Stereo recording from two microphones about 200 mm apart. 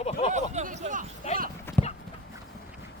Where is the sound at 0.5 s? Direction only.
35° right (ahead or behind).